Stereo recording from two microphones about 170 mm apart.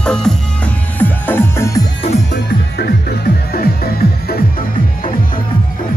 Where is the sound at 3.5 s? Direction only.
65° left (ahead or behind).